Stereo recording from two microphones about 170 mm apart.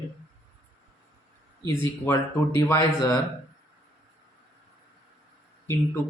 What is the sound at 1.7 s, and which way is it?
Speech, 15° left (ahead or behind).